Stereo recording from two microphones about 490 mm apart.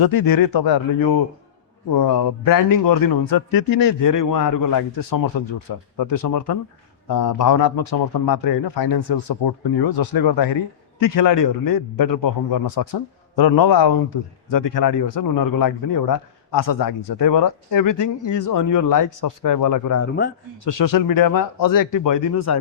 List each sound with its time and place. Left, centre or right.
0.0 s speech: left